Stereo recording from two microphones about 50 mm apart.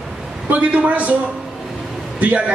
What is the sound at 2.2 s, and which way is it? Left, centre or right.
Speech, right.